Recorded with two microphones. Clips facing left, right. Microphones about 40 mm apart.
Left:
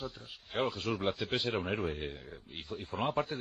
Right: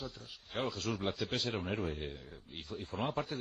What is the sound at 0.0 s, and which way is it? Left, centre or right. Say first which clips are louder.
A man's voice: left 3 dB; centre.